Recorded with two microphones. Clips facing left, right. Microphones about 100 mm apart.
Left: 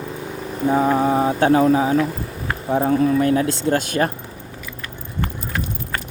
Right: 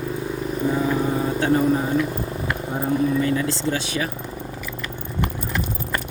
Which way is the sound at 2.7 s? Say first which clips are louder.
Left 5 dB; 85° left.